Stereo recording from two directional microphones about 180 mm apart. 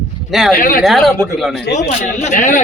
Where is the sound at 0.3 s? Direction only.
Centre (ahead or behind).